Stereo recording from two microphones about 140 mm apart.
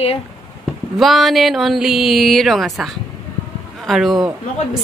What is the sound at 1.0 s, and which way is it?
A woman's voice, centre (ahead or behind).